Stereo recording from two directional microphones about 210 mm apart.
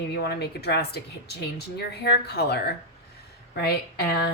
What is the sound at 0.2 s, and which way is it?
Speech, 50° left (ahead or behind).